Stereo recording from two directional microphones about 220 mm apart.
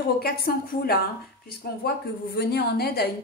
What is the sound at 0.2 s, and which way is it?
A woman's voice, 45° left (ahead or behind).